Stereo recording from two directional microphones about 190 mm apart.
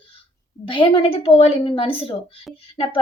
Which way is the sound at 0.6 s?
25° left (ahead or behind).